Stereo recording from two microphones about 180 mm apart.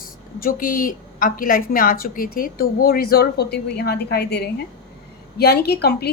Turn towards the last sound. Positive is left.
turn(degrees=65)  # may be behind; listen again after turning